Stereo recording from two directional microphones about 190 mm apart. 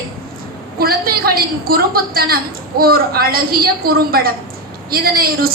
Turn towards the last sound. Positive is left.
turn(degrees=-50)  # may be behind; listen again after turning